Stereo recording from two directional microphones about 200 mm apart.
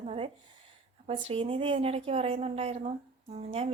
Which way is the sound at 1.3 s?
25° right (ahead or behind).